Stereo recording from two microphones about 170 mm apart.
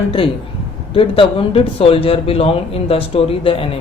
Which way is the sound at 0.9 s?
30° left (ahead or behind).